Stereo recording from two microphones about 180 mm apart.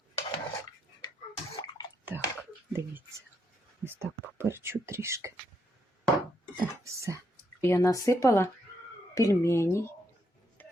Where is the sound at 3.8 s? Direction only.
15° right (ahead or behind).